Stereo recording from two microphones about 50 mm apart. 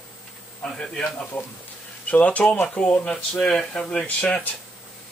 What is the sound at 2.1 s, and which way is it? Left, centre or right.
Speech, left.